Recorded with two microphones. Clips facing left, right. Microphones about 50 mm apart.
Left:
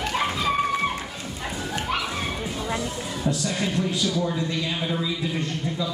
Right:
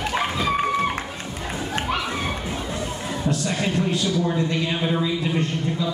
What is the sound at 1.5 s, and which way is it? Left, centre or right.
Children playing, right.